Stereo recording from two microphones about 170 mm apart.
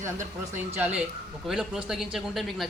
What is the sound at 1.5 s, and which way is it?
Speech, centre (ahead or behind).